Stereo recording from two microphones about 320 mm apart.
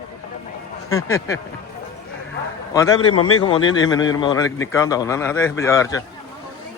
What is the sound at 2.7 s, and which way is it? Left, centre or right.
A man's voice, centre.